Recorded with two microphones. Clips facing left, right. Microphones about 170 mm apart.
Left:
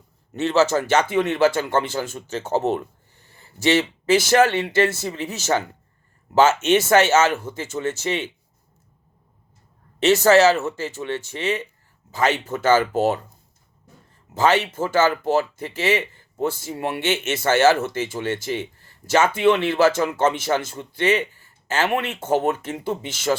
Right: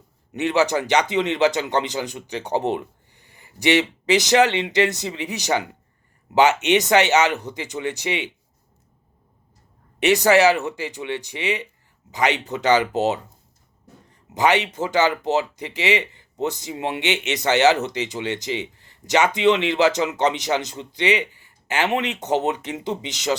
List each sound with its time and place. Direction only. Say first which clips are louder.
0.3 s speech: left 1 dB; 15° right (ahead or behind)
10.0 s speech: left 1 dB; 15° right (ahead or behind)
14.3 s speech: left 1 dB; 15° right (ahead or behind)